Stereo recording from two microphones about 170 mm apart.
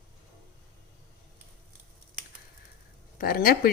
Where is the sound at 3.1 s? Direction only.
60° left (ahead or behind).